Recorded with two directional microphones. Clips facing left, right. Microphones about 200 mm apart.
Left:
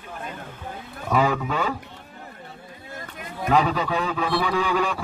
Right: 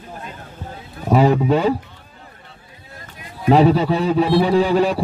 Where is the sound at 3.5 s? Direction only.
35° right (ahead or behind).